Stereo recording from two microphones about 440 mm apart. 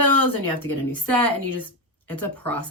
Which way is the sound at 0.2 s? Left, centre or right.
Left.